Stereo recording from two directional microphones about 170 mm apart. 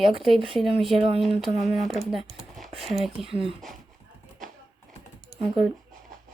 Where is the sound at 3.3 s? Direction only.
30° right (ahead or behind).